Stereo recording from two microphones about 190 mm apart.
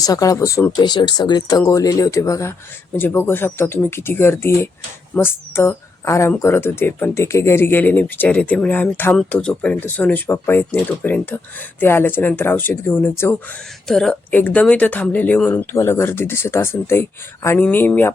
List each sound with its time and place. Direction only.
0.0 s speech: 20° left (ahead or behind)